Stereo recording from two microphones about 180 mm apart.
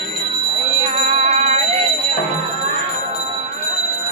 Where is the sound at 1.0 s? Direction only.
40° right (ahead or behind).